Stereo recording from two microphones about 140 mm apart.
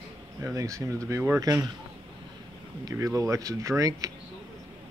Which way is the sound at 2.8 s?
25° right (ahead or behind).